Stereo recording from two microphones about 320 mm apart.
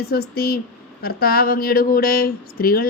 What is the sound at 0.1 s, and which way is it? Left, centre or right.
Speech, left.